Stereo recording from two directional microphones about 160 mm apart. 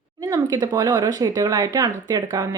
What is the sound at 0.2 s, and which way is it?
Speech, 20° right (ahead or behind).